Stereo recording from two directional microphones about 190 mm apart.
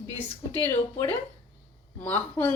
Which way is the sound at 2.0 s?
10° left (ahead or behind).